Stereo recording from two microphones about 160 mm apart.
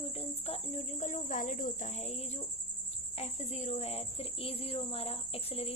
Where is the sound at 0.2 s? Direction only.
40° left (ahead or behind).